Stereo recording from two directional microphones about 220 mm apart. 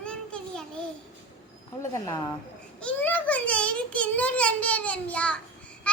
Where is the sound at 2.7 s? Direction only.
5° left (ahead or behind).